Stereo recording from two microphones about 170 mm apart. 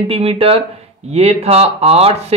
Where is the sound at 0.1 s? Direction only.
35° right (ahead or behind).